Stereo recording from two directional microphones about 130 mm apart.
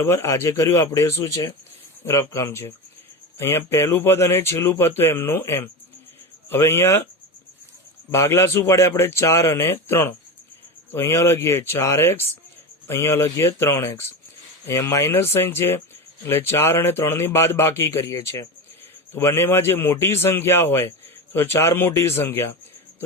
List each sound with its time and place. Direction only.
0.0 s speech: 20° left (ahead or behind)
8.1 s speech: 20° left (ahead or behind)